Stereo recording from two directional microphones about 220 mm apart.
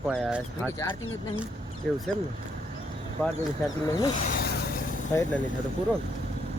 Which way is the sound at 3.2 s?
5° left (ahead or behind).